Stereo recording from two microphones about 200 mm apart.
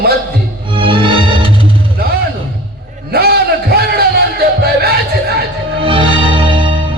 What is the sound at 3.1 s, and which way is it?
Music, 50° right (ahead or behind).